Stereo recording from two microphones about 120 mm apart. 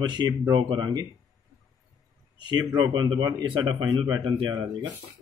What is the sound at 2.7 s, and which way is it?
Speech, 35° right (ahead or behind).